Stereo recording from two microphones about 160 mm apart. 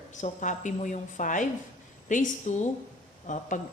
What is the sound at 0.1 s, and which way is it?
A woman's voice, 50° left (ahead or behind).